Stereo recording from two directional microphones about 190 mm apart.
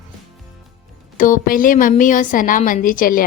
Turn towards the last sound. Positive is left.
turn(degrees=45)  # may be behind; listen again after turning